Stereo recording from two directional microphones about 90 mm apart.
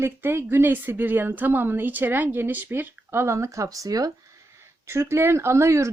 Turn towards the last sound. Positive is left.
turn(degrees=-30)  # may be behind; listen again after turning